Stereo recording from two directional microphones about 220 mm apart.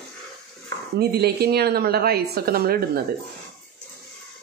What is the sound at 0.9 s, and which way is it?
Speech, 45° right (ahead or behind).